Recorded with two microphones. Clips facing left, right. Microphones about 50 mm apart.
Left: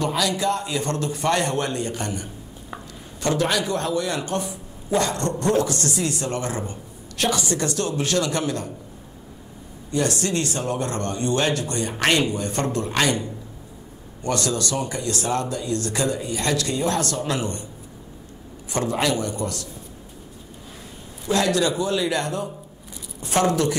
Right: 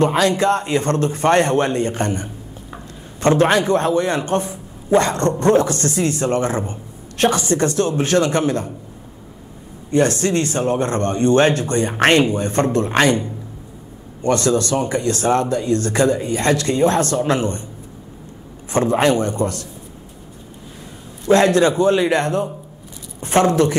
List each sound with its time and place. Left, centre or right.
0.0 s speech: right
9.8 s speech: right
18.7 s speech: right
21.3 s speech: right